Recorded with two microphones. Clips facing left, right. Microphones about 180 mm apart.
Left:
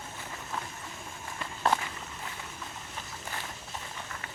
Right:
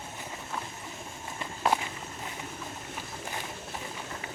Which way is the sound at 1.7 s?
15° right (ahead or behind).